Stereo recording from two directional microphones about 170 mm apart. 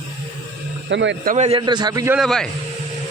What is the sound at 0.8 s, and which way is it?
Speech, 90° right.